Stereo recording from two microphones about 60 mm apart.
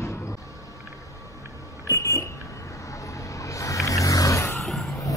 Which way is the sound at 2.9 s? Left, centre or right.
Left.